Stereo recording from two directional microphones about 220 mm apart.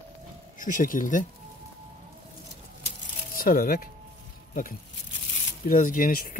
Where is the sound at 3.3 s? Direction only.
40° left (ahead or behind).